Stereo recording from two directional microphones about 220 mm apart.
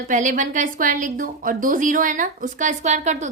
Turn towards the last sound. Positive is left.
turn(degrees=-30)  # may be behind; listen again after turning